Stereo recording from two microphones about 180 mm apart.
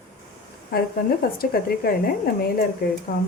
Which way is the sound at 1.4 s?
55° left (ahead or behind).